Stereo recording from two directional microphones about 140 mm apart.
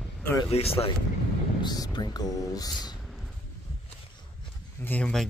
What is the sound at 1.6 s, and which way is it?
Speech, 30° left (ahead or behind).